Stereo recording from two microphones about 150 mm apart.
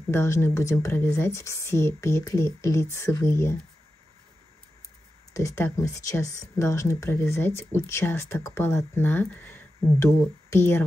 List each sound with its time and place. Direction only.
0.1 s speech: 15° left (ahead or behind)
5.3 s speech: 20° left (ahead or behind)